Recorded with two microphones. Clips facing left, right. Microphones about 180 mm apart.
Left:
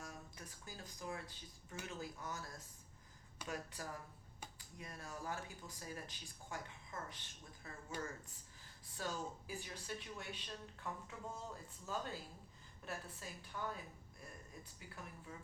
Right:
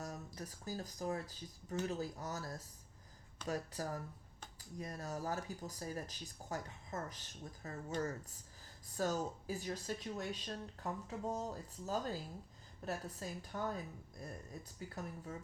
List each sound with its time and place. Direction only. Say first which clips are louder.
0.0 s speech: right 7 dB; 40° right (ahead or behind)